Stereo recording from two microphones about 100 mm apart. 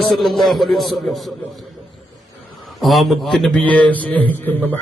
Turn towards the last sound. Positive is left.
turn(degrees=15)  # may be behind; listen again after turning